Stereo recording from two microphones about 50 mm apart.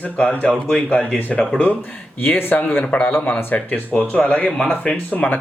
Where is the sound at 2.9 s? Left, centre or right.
Left.